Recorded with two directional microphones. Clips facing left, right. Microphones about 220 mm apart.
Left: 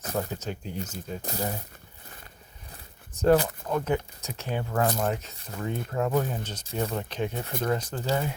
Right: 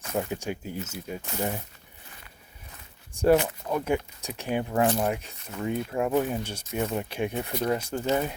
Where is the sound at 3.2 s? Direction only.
10° right (ahead or behind).